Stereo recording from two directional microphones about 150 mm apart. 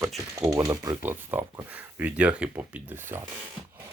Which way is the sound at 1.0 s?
10° right (ahead or behind).